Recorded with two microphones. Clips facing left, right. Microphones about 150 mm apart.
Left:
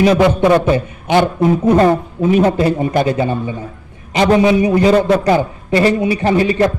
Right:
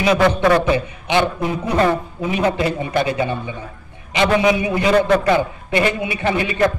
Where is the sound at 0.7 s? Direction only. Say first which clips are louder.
Left 4 dB; 45° left (ahead or behind).